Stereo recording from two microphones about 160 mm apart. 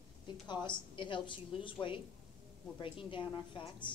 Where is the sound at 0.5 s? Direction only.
30° left (ahead or behind).